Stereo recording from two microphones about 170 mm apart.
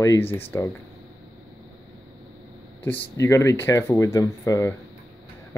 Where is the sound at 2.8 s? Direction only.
15° left (ahead or behind).